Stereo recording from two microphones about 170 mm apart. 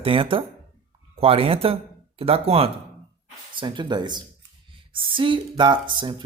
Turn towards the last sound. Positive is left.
turn(degrees=-30)  # may be behind; listen again after turning